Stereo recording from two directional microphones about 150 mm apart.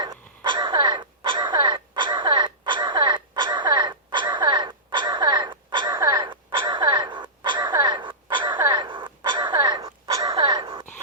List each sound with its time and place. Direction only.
0.0 s crow: 30° right (ahead or behind)